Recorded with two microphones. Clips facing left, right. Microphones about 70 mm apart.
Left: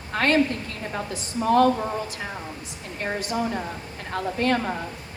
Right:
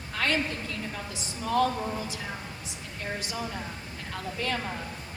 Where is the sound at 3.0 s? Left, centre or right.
Left.